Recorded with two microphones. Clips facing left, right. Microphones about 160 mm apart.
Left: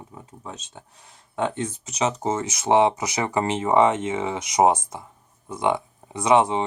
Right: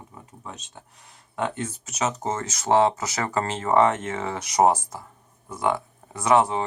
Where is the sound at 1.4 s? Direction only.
20° left (ahead or behind).